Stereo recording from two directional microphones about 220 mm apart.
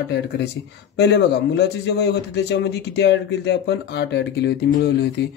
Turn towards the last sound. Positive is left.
turn(degrees=50)  # may be behind; listen again after turning